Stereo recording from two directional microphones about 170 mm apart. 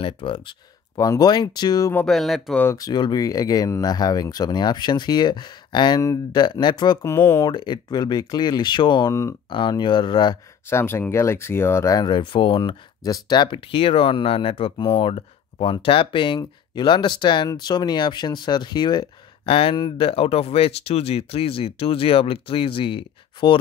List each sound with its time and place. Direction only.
0.0 s speech: 30° left (ahead or behind)
2.0 s speech: centre (ahead or behind)
2.6 s speech: 20° left (ahead or behind)
10.7 s speech: 15° left (ahead or behind); by 23.6 s 30° left (ahead or behind)